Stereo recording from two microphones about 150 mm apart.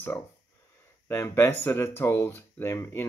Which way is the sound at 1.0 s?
20° left (ahead or behind).